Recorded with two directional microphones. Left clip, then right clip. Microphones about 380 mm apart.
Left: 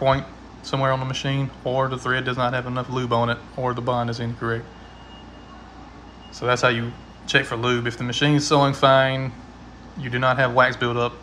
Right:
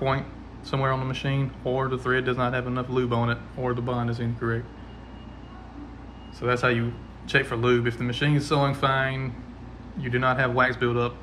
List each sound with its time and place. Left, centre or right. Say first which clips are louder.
0.7 s speech: left 4 dB; centre
6.4 s speech: left 4 dB; centre